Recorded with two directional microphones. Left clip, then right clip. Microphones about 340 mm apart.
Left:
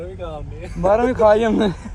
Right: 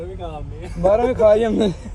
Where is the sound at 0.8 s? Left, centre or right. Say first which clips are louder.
Even; left.